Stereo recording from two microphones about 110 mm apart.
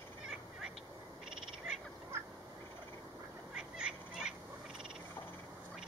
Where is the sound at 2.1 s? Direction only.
25° right (ahead or behind).